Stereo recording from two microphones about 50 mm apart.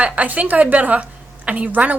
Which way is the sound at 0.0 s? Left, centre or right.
Right.